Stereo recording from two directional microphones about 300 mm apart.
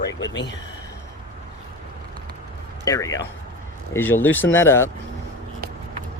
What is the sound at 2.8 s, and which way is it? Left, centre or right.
Speech, centre.